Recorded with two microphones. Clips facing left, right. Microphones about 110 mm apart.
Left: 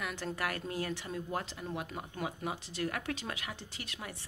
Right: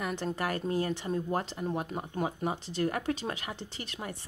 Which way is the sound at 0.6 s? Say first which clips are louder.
Right 6 dB; 30° right (ahead or behind).